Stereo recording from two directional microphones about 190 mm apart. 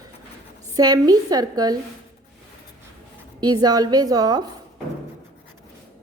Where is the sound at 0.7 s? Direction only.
20° right (ahead or behind).